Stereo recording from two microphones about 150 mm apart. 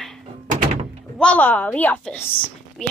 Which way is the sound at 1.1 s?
10° left (ahead or behind).